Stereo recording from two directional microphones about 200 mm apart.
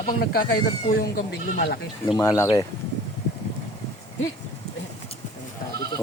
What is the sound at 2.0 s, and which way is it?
Speech, 20° left (ahead or behind).